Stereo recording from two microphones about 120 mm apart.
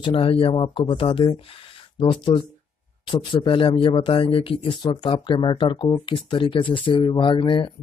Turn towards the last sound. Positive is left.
turn(degrees=40)  # may be behind; listen again after turning